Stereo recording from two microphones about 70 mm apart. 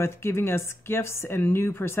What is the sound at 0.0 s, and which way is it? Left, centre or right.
Speech, left.